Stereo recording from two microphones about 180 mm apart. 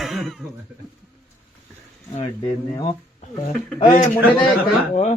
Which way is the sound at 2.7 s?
25° left (ahead or behind).